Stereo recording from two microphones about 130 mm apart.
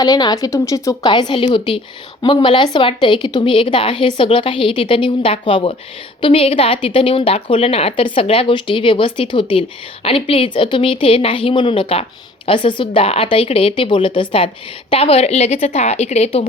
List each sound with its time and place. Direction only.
0.0 s a woman's voice: 30° left (ahead or behind); by 16.5 s 50° left (ahead or behind)